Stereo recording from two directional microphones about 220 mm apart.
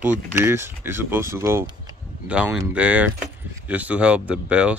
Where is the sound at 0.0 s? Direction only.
10° right (ahead or behind).